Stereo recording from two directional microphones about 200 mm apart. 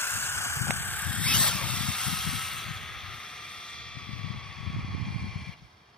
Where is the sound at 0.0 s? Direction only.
10° left (ahead or behind).